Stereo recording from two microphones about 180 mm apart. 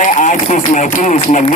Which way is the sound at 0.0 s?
45° left (ahead or behind).